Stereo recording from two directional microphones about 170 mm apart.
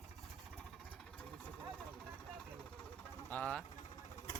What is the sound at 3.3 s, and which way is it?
Speech, 10° left (ahead or behind).